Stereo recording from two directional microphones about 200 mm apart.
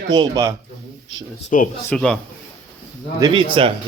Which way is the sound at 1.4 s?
40° left (ahead or behind).